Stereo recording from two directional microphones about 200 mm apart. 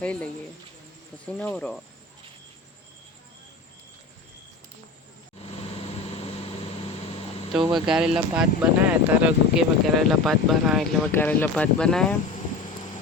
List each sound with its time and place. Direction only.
0.0 s speech: 5° left (ahead or behind)
1.4 s speech: 5° left (ahead or behind)
5.4 s vehicle: 30° left (ahead or behind)
7.5 s speech: centre (ahead or behind)